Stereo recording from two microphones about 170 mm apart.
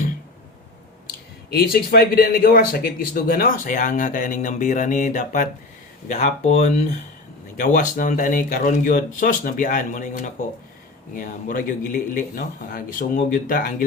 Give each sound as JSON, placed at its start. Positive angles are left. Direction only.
{"t": 1.5, "sound": "a man's voice", "side_deg": 65}